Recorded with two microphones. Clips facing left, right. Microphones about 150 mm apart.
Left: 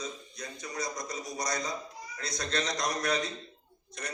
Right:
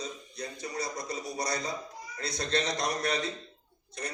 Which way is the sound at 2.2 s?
30° right (ahead or behind).